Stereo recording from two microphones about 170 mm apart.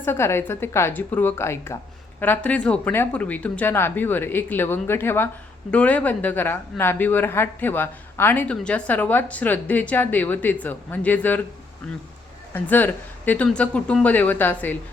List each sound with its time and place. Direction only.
0.0 s speech: 15° left (ahead or behind)
12.5 s speech: 10° left (ahead or behind)